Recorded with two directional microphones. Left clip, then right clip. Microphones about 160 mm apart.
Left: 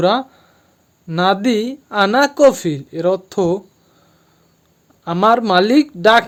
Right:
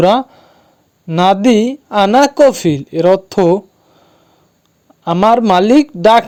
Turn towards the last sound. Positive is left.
turn(degrees=-30)  # may be behind; listen again after turning